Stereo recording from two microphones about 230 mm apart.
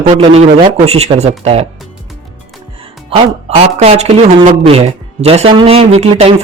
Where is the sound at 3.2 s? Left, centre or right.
Right.